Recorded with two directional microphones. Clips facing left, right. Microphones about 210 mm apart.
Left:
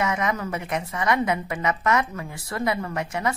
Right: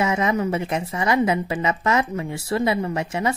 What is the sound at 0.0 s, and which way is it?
A woman's voice, 25° right (ahead or behind).